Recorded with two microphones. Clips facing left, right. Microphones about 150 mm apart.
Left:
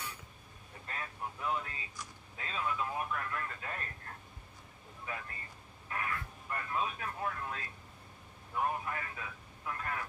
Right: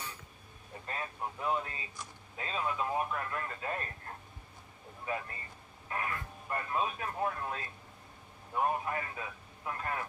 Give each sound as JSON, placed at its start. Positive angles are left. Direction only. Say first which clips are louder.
{"t": 0.9, "sound": "speech", "louder": "right 3 dB", "side_deg": -30}
{"t": 5.0, "sound": "speech", "louder": "right 6 dB", "side_deg": -30}